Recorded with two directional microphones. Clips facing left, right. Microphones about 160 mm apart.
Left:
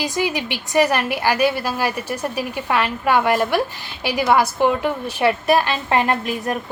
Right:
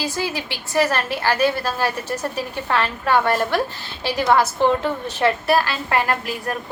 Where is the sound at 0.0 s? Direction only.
15° left (ahead or behind).